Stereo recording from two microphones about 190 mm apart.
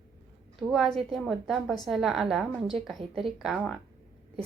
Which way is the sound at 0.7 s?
Centre (ahead or behind).